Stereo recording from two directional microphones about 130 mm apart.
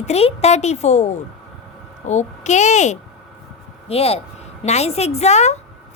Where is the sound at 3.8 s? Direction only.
50° left (ahead or behind).